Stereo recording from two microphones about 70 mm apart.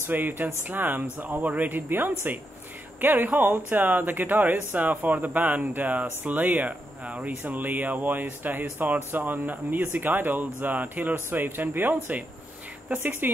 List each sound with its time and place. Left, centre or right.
0.0 s speech: right